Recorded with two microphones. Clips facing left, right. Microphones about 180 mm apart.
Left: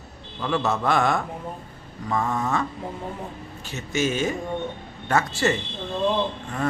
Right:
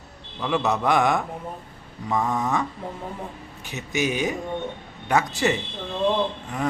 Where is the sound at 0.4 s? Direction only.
15° right (ahead or behind).